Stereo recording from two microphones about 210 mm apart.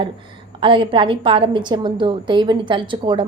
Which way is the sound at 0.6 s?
25° right (ahead or behind).